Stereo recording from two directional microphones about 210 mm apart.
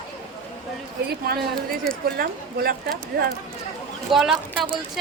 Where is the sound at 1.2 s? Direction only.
45° right (ahead or behind).